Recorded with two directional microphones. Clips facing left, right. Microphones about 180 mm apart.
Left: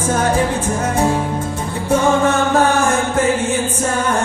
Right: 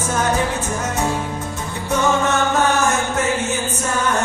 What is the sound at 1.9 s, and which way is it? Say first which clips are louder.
Music: left 4 dB; 30° left (ahead or behind).